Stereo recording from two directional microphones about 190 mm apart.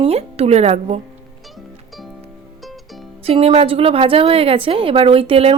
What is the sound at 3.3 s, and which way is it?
Speech, 30° right (ahead or behind).